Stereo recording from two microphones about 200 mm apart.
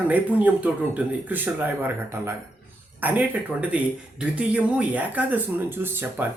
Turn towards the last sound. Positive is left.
turn(degrees=-10)  # may be behind; listen again after turning